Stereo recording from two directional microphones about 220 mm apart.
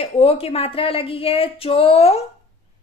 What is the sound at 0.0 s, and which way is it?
Speech, 25° left (ahead or behind).